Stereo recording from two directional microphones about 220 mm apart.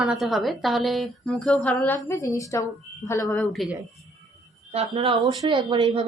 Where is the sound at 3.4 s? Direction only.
Centre (ahead or behind).